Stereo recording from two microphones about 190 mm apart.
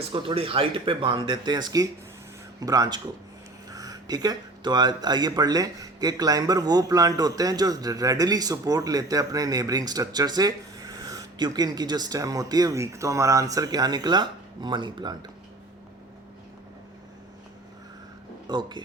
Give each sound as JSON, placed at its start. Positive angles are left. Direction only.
{"t": 0.0, "sound": "speech", "side_deg": -25}
{"t": 18.4, "sound": "speech", "side_deg": -25}